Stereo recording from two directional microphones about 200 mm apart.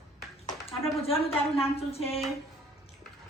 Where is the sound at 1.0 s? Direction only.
30° left (ahead or behind).